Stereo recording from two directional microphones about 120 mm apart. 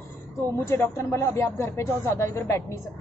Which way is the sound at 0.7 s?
25° left (ahead or behind).